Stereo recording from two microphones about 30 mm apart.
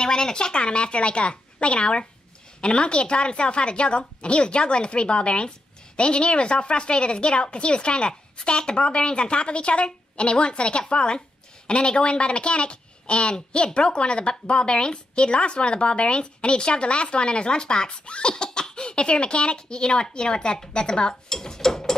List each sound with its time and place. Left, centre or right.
0.0 s speech: left
21.3 s mechanisms: centre